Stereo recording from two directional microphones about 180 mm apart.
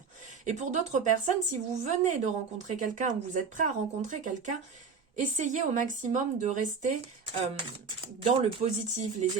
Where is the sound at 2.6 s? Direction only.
40° right (ahead or behind).